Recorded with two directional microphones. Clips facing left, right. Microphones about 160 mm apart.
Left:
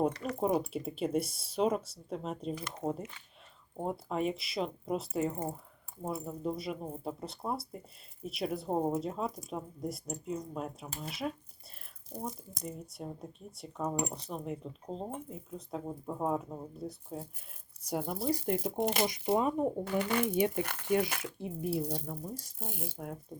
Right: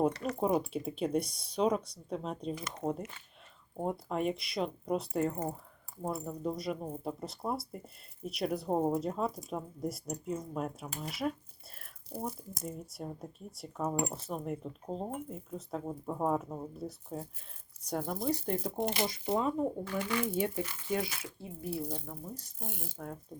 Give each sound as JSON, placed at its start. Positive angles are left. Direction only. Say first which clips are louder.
{"t": 0.3, "sound": "speech", "louder": "even", "side_deg": 0}
{"t": 4.1, "sound": "speech", "louder": "left 2 dB", "side_deg": 0}
{"t": 17.8, "sound": "speech", "louder": "even", "side_deg": 10}
{"t": 20.1, "sound": "speech", "louder": "left 2 dB", "side_deg": 55}
{"t": 21.3, "sound": "speech", "louder": "left 4 dB", "side_deg": 20}